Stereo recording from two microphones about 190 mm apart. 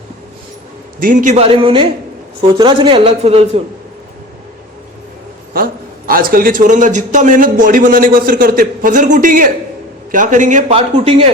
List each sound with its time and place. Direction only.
0.9 s a man's voice: 45° right (ahead or behind)
6.1 s a man's voice: 50° right (ahead or behind); by 11.3 s 30° right (ahead or behind)